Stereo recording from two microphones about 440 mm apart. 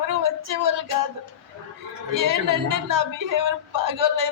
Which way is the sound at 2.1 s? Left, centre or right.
Right.